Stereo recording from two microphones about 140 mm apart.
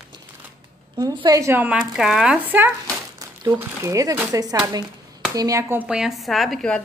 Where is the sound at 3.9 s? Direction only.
25° right (ahead or behind); by 6.8 s 5° left (ahead or behind).